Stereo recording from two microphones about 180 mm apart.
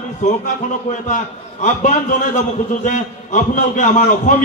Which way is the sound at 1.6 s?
45° left (ahead or behind).